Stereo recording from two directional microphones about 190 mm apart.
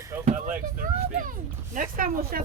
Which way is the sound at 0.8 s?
45° right (ahead or behind).